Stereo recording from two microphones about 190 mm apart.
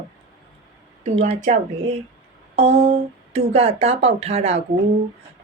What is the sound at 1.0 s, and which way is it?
Speech, 30° right (ahead or behind).